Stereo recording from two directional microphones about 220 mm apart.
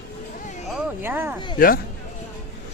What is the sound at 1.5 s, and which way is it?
Speech, 40° left (ahead or behind).